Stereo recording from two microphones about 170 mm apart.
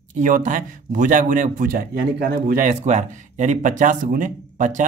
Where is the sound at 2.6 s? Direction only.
45° right (ahead or behind).